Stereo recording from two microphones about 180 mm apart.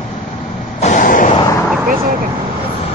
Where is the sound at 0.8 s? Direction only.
45° left (ahead or behind).